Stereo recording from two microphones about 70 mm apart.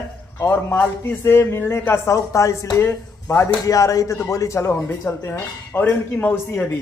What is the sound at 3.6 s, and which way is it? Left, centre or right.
Speech, left.